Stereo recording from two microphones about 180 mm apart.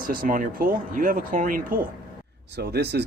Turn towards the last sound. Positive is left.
turn(degrees=-65)  # may be behind; listen again after turning